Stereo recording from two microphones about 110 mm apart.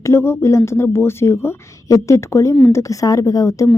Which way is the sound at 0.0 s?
25° left (ahead or behind).